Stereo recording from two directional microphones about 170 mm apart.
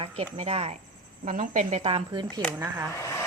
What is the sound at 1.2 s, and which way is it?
A woman's voice, 50° right (ahead or behind).